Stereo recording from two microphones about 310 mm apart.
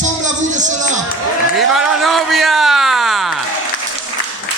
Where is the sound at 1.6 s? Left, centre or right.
Centre.